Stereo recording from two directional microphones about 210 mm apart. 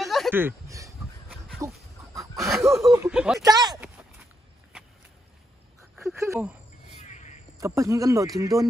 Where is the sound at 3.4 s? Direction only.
20° right (ahead or behind).